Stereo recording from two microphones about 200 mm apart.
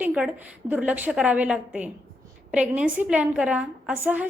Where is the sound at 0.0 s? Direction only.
5° right (ahead or behind).